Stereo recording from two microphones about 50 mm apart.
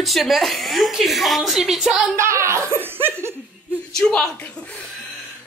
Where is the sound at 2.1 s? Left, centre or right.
Right.